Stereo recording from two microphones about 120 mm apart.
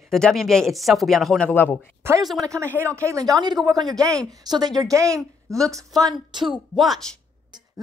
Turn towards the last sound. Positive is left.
turn(degrees=0)  # may be behind; listen again after turning